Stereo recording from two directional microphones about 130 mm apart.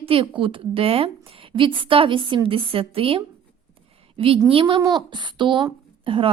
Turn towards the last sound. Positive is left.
turn(degrees=-45)  # may be behind; listen again after turning